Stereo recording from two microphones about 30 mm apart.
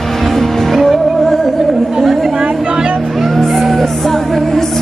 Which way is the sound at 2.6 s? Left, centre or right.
Right.